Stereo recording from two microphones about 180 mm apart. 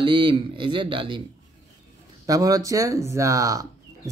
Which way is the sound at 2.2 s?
20° right (ahead or behind).